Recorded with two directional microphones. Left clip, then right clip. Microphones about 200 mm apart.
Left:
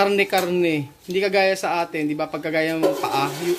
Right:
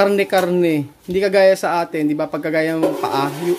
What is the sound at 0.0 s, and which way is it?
Speech, 30° right (ahead or behind).